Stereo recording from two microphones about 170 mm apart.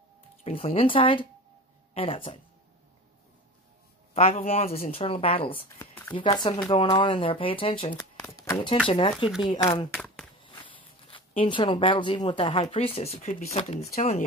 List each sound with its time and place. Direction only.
0.4 s speech: 35° left (ahead or behind)
4.1 s speech: 40° left (ahead or behind)
4.6 s speech: 60° left (ahead or behind)
4.9 s speech: 35° left (ahead or behind)
8.3 s speech: 20° left (ahead or behind)
8.8 s speech: 30° left (ahead or behind)
9.9 s a sound: 5° left (ahead or behind)
10.4 s speech: 30° left (ahead or behind)